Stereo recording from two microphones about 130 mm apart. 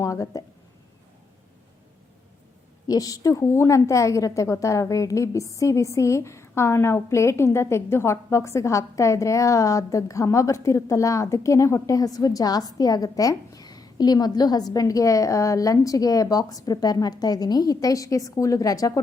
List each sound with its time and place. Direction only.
0.0 s a woman's voice: 25° left (ahead or behind)
2.8 s a woman's voice: 30° left (ahead or behind)